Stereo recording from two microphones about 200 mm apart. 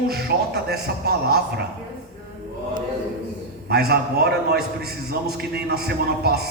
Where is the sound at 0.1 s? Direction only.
55° right (ahead or behind).